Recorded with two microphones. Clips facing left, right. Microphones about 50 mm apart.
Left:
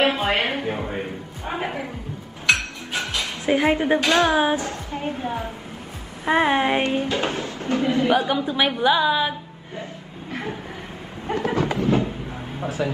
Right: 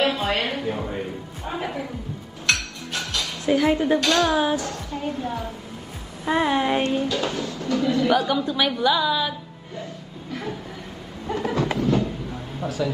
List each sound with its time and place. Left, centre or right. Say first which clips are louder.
0.0 s a woman's voice: left 2 dB; left
2.5 s music: left 3 dB; centre
3.0 s speech: left 2 dB; left
11.2 s a sound: left 1 dB; left